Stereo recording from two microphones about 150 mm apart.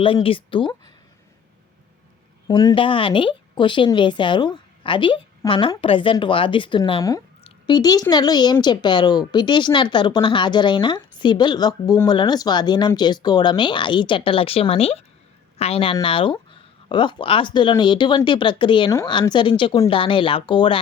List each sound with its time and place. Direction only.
0.0 s speech: 35° left (ahead or behind)
2.5 s speech: 30° left (ahead or behind)
7.4 s a sound: 30° left (ahead or behind)
8.1 s speech: 25° left (ahead or behind)